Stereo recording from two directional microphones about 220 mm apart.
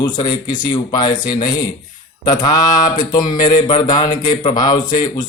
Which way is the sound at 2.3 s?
20° left (ahead or behind).